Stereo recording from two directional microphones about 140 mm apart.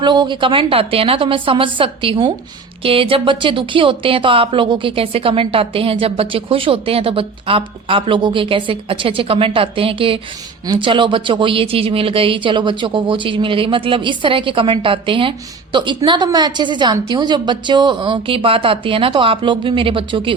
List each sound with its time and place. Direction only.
0.0 s speech: 30° right (ahead or behind)